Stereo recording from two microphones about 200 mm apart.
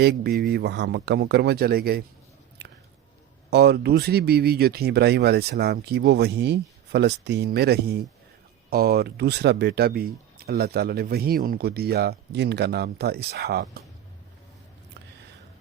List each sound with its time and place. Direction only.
0.0 s speech: 55° right (ahead or behind)
3.5 s speech: 55° right (ahead or behind)